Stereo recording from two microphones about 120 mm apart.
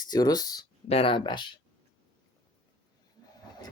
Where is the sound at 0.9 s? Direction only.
50° left (ahead or behind).